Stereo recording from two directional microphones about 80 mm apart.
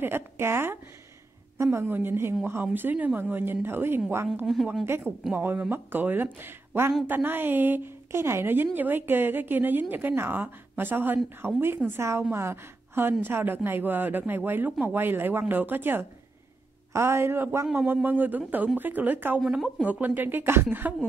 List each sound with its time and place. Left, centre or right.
0.0 s a woman's voice: right
4.5 s speech: centre
4.8 s a woman's voice: right